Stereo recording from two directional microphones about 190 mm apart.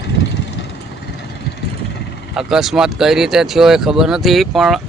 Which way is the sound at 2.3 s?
5° right (ahead or behind).